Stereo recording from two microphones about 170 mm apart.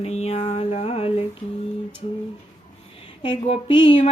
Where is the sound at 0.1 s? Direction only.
40° left (ahead or behind).